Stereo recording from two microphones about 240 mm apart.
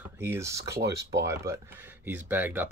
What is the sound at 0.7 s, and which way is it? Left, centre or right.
Speech, right.